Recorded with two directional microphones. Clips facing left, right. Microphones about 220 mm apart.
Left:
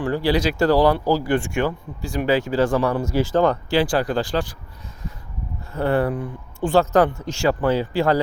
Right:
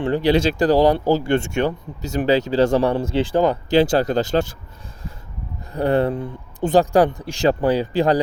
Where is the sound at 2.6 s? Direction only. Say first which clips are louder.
Right 4 dB; 40° right (ahead or behind).